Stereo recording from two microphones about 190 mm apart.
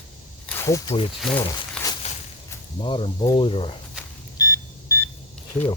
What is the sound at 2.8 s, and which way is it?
Speech, 30° left (ahead or behind).